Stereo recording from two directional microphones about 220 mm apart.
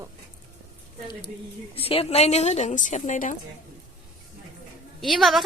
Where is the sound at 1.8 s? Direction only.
25° left (ahead or behind).